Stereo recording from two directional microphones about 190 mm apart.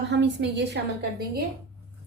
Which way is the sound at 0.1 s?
65° right (ahead or behind).